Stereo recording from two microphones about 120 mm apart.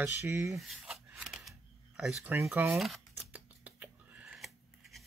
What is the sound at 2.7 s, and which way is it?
Speech, centre (ahead or behind).